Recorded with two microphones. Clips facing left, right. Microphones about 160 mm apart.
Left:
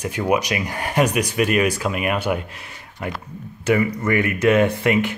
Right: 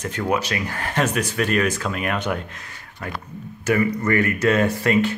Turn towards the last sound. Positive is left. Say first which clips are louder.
# even
turn(degrees=15)  # may be behind; listen again after turning